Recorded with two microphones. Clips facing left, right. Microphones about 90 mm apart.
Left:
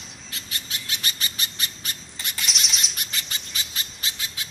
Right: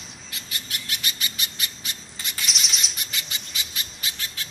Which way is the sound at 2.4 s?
Centre (ahead or behind).